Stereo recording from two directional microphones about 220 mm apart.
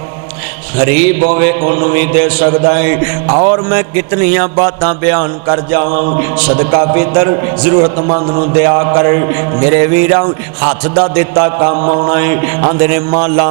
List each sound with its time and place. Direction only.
0.8 s speech: 10° right (ahead or behind)
5.9 s music: 35° right (ahead or behind)
6.4 s speech: 15° right (ahead or behind)
12.1 s speech: 15° right (ahead or behind)